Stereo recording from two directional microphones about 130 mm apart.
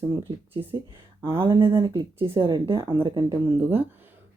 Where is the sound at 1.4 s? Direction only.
40° right (ahead or behind).